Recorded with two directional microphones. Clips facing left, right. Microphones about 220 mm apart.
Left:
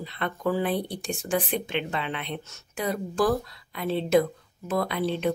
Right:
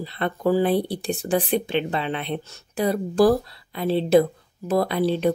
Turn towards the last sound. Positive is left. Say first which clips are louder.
# right 5 dB
turn(degrees=-35)  # may be behind; listen again after turning